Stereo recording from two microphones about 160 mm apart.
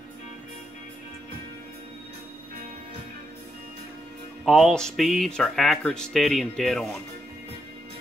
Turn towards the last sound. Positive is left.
turn(degrees=0)  # may be behind; listen again after turning